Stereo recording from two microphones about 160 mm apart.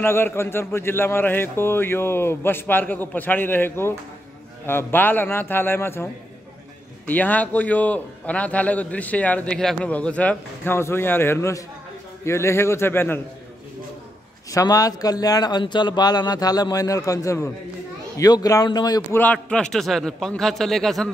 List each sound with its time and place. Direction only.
0.0 s a man's voice: 15° left (ahead or behind)
7.1 s a man's voice: 10° left (ahead or behind)
14.5 s a man's voice: 20° left (ahead or behind)
19.1 s a man's voice: 10° left (ahead or behind)